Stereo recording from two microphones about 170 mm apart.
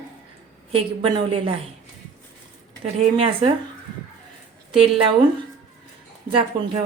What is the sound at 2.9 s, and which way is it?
Speech, 35° right (ahead or behind).